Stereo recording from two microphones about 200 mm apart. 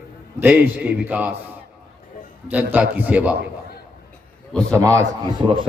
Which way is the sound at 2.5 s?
10° right (ahead or behind).